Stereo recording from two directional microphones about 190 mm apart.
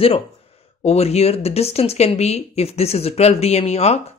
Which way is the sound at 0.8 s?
35° left (ahead or behind).